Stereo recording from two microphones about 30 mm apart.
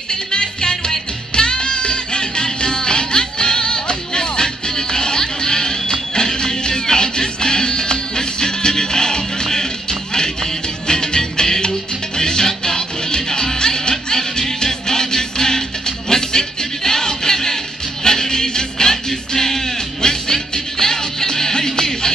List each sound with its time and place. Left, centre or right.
0.1 s music: left